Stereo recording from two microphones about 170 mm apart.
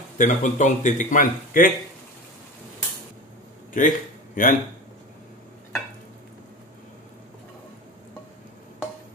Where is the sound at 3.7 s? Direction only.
55° left (ahead or behind).